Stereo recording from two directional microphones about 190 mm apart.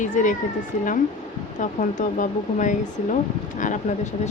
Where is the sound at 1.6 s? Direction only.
40° left (ahead or behind).